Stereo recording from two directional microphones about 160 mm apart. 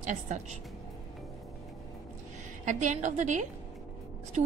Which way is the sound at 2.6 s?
50° right (ahead or behind).